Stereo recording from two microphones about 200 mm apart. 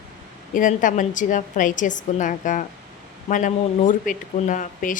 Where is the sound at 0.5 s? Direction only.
40° left (ahead or behind).